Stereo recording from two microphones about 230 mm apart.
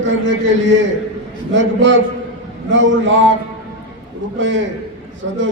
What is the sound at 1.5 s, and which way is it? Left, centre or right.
A man's voice, right.